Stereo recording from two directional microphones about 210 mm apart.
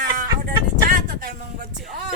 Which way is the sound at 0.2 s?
40° right (ahead or behind).